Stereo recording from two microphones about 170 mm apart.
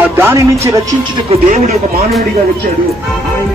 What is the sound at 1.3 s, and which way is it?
Speech, 45° right (ahead or behind).